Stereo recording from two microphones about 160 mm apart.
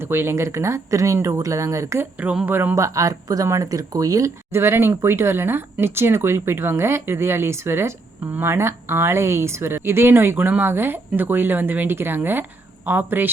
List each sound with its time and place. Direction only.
0.0 s speech: 15° right (ahead or behind)